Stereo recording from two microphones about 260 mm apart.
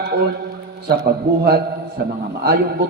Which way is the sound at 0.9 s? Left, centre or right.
Right.